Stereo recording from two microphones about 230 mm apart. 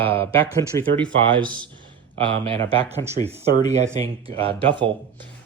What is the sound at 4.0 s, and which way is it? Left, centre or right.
Speech, right.